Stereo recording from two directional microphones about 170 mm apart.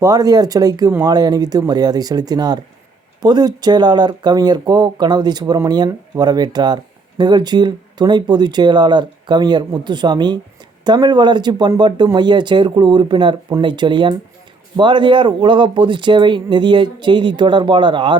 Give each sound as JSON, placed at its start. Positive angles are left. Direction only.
{"t": 0.0, "sound": "speech", "side_deg": -20}